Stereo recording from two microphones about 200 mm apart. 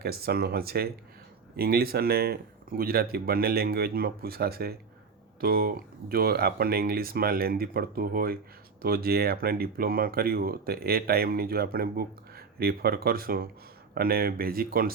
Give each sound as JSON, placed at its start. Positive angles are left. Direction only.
{"t": 0.0, "sound": "speech", "side_deg": -50}